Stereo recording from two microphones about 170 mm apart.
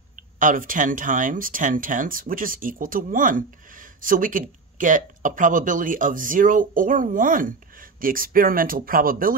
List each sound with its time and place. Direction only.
0.1 s speech: 50° right (ahead or behind)